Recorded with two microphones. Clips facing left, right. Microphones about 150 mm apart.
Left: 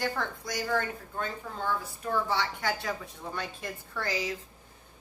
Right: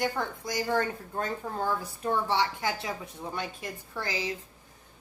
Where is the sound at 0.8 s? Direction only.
40° right (ahead or behind).